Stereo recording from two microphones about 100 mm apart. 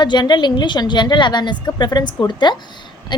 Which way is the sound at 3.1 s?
50° left (ahead or behind).